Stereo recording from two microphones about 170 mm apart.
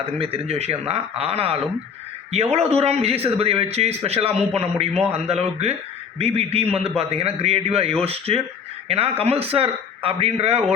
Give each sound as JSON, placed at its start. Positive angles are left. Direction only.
{"t": 0.0, "sound": "a man's voice", "side_deg": -35}